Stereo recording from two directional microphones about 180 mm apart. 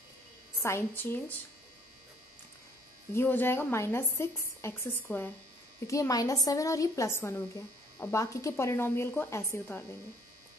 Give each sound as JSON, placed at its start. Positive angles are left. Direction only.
{"t": 0.6, "sound": "a woman's voice", "side_deg": 15}
{"t": 3.2, "sound": "a woman's voice", "side_deg": 10}